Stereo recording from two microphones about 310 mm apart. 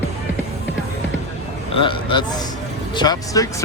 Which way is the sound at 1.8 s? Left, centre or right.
Centre.